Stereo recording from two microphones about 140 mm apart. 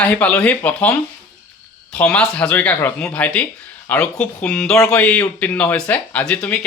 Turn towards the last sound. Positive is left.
turn(degrees=10)  # may be behind; listen again after turning